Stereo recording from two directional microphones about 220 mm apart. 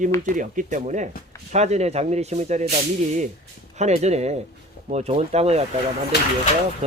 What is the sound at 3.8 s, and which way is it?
Speech, 30° right (ahead or behind).